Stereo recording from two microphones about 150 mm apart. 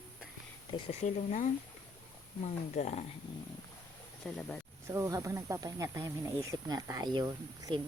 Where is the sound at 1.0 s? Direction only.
55° left (ahead or behind).